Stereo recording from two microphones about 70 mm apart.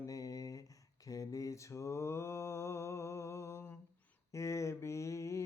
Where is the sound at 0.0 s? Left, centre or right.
Left.